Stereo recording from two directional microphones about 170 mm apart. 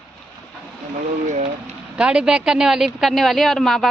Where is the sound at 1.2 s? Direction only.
40° right (ahead or behind).